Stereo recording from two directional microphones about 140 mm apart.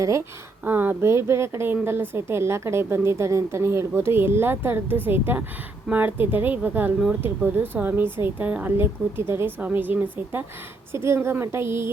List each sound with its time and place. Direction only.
0.0 s speech: 20° right (ahead or behind)